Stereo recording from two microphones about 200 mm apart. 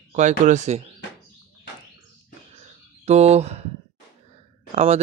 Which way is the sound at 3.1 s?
30° right (ahead or behind).